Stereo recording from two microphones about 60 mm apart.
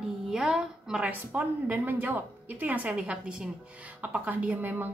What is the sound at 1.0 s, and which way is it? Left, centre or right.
A woman's voice, right.